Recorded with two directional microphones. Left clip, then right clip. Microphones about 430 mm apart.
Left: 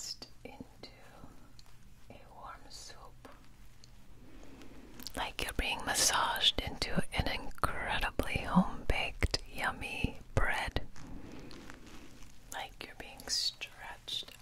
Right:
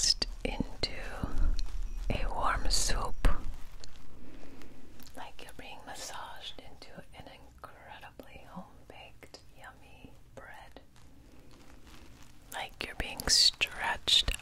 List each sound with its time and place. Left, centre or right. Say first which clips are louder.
0.2 s whispering: right 14 dB; right
5.1 s whispering: left 9 dB; left
12.4 s whispering: right 3 dB; centre
12.9 s whispering: right 10 dB; right